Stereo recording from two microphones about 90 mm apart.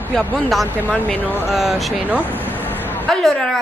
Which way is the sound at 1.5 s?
Centre (ahead or behind).